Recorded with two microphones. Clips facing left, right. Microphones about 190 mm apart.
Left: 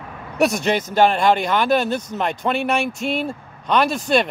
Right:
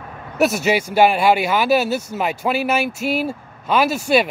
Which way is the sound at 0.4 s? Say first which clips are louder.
Right 1 dB; 5° right (ahead or behind).